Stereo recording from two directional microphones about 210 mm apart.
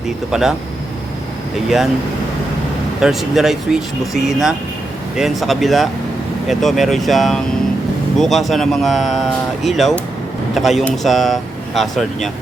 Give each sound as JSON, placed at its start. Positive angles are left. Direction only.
{"t": 0.3, "sound": "speech", "side_deg": 0}
{"t": 3.0, "sound": "speech", "side_deg": 0}